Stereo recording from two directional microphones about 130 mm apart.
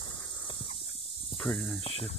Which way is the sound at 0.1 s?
15° left (ahead or behind).